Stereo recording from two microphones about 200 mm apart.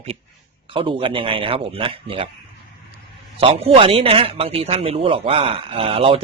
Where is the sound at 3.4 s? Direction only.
30° right (ahead or behind).